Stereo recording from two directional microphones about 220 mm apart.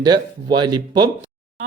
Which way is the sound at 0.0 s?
20° right (ahead or behind).